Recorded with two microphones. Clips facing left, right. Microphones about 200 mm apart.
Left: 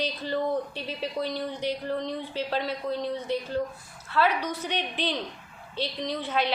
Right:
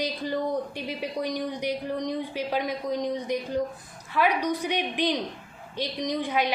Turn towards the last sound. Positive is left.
turn(degrees=-15)  # may be behind; listen again after turning